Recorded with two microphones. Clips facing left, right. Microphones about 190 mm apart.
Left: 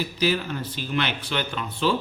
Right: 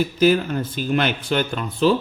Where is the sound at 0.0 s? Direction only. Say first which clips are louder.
Right 7 dB; 50° right (ahead or behind).